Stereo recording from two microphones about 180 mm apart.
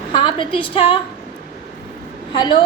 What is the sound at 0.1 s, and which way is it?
Speech, 30° left (ahead or behind).